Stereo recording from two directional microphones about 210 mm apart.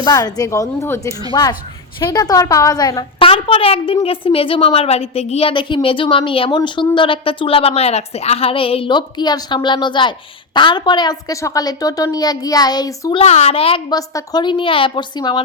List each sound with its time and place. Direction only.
0.1 s a woman's voice: 15° left (ahead or behind)